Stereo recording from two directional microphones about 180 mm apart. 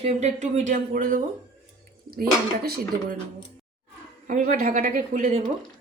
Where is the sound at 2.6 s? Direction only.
60° right (ahead or behind).